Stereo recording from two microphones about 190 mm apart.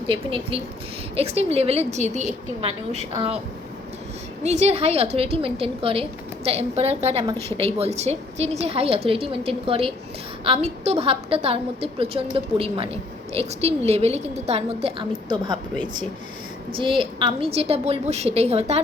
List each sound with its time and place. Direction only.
0.1 s a woman's voice: 30° right (ahead or behind)
4.4 s a woman's voice: 35° right (ahead or behind)
16.7 s a woman's voice: 25° right (ahead or behind)